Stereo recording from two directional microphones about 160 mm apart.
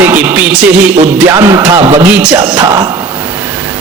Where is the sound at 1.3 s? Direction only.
20° right (ahead or behind).